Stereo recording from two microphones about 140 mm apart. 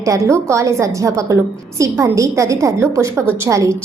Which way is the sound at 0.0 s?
20° right (ahead or behind).